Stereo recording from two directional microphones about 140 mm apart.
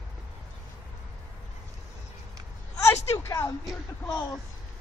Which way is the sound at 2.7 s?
20° left (ahead or behind).